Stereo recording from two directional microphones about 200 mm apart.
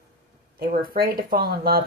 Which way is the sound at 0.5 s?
45° right (ahead or behind).